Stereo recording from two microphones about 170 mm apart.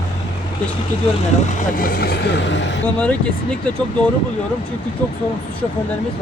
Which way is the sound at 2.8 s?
5° left (ahead or behind).